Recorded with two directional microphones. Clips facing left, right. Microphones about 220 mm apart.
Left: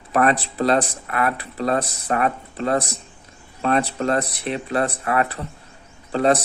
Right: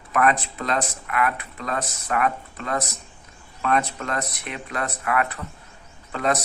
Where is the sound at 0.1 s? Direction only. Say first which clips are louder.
Left 2 dB; 35° left (ahead or behind).